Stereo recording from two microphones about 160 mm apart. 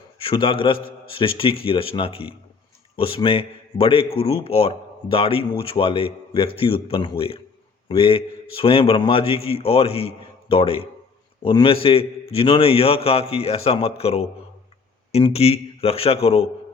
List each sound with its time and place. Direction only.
0.2 s speech: 35° left (ahead or behind)